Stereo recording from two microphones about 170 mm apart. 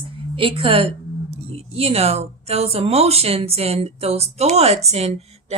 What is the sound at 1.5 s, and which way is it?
Speech, 35° right (ahead or behind).